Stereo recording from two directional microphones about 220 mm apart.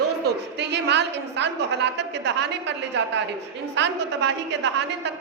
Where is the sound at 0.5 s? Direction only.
50° right (ahead or behind).